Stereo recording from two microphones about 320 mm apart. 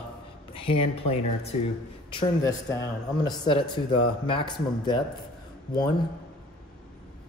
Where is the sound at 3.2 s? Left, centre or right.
Centre.